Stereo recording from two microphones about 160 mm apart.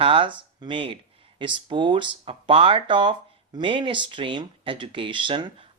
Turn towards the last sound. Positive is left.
turn(degrees=-30)  # may be behind; listen again after turning